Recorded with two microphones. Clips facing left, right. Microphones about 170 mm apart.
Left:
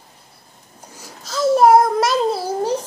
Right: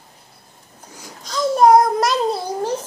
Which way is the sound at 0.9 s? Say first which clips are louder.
Even; 5° left (ahead or behind).